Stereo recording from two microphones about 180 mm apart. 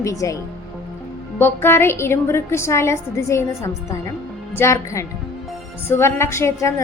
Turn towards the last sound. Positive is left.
turn(degrees=15)  # may be behind; listen again after turning